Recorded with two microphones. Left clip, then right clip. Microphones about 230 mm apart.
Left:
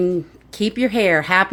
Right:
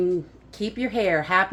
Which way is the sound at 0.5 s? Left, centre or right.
Left.